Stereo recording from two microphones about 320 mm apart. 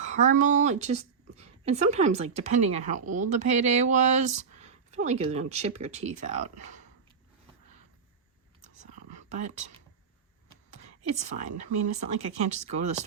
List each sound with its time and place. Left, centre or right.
0.0 s a woman's voice: right
9.3 s a woman's voice: right